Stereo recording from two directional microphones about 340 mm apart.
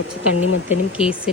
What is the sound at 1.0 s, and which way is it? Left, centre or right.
Speech, centre.